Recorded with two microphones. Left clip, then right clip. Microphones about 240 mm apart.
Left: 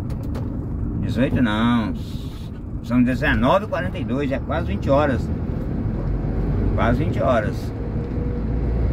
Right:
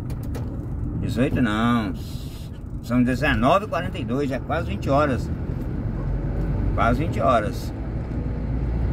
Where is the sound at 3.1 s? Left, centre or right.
Centre.